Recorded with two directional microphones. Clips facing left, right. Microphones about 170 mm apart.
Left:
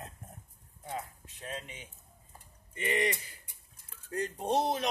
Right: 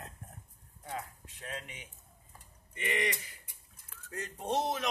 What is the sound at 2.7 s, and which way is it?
Speech, 30° left (ahead or behind).